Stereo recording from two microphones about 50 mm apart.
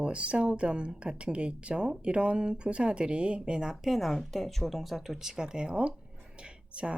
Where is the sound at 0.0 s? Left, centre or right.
Right; by 4.1 s centre.